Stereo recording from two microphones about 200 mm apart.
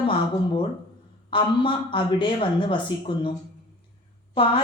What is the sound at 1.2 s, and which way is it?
A woman's voice, 25° left (ahead or behind).